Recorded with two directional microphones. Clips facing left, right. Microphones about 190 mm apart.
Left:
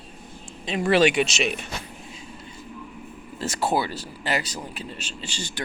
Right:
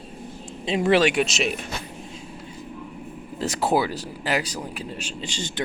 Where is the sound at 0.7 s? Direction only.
20° right (ahead or behind).